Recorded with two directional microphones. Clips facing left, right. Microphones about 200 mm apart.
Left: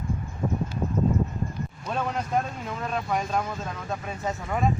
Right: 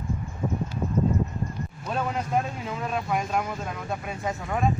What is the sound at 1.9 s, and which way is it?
Speech, 5° right (ahead or behind).